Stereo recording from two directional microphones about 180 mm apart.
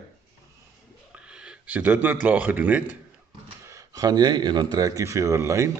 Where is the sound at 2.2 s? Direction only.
10° right (ahead or behind).